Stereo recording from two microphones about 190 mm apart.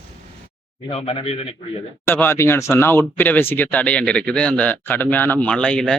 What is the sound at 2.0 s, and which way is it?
Speech, 10° left (ahead or behind).